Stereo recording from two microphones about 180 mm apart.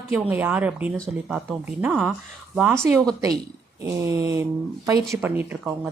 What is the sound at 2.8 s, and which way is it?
Speech, 15° right (ahead or behind).